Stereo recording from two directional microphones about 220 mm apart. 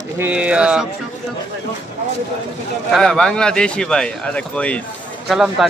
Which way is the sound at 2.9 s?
Centre (ahead or behind).